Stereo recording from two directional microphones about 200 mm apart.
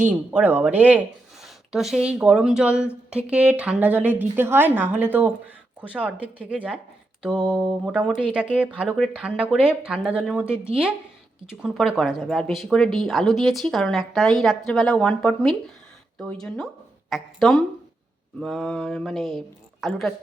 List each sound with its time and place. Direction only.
0.0 s speech: 10° right (ahead or behind)
7.3 s a sound: 25° right (ahead or behind)
7.6 s speech: 5° right (ahead or behind)